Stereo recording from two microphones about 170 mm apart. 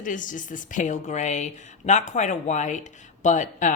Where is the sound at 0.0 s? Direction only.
50° left (ahead or behind).